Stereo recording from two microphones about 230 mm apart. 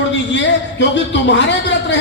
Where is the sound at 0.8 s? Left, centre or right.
Left.